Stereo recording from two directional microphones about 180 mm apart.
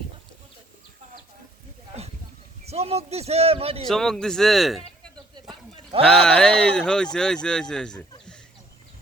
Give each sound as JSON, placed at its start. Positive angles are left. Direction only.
{"t": 2.6, "sound": "a man's voice", "side_deg": -35}
{"t": 3.8, "sound": "speech", "side_deg": 5}
{"t": 5.1, "sound": "a sound", "side_deg": -25}
{"t": 6.2, "sound": "speech", "side_deg": 5}